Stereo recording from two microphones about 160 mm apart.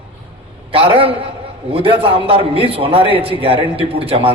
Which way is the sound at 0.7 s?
35° right (ahead or behind).